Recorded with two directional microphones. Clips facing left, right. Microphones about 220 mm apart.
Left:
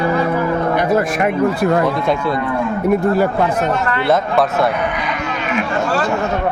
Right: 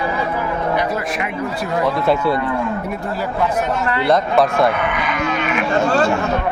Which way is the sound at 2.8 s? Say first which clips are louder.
Left 10 dB; 55° left (ahead or behind).